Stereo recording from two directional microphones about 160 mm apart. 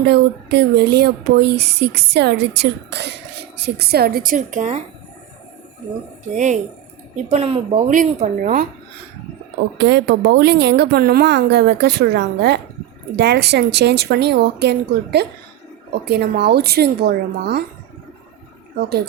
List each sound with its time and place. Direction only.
0.0 s a woman's voice: 90° right; by 4.8 s 50° right (ahead or behind)
6.3 s speech: 50° right (ahead or behind)
7.9 s speech: 55° right (ahead or behind)
9.8 s speech: 90° right